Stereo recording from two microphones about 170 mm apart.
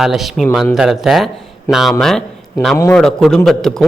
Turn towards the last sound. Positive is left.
turn(degrees=5)  # may be behind; listen again after turning